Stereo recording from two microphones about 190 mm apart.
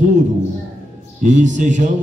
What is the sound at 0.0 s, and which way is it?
A man's voice, 40° right (ahead or behind).